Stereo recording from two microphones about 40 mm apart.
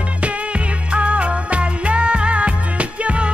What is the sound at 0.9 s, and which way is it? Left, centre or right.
Music, right.